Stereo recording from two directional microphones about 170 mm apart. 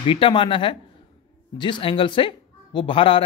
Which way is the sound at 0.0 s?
30° left (ahead or behind).